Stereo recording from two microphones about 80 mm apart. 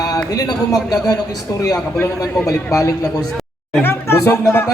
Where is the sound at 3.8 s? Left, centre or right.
Left.